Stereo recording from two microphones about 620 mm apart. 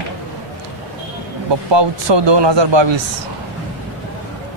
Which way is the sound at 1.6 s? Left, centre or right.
Right.